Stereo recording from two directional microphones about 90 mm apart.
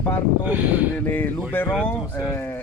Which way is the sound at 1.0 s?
20° left (ahead or behind).